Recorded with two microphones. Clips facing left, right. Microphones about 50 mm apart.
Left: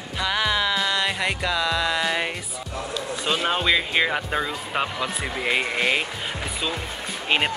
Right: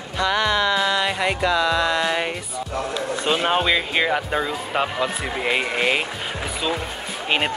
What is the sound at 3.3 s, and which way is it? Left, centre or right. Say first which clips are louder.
Speech: right 3 dB; centre.